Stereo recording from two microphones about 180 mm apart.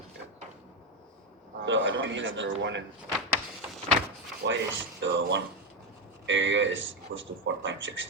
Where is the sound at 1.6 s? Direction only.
90° right.